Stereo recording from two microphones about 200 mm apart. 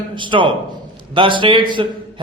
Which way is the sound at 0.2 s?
25° right (ahead or behind).